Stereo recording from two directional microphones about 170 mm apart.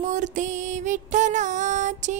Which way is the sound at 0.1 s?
45° right (ahead or behind).